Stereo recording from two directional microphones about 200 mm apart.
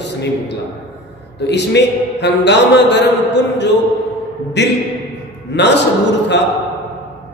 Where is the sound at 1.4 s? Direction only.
60° left (ahead or behind).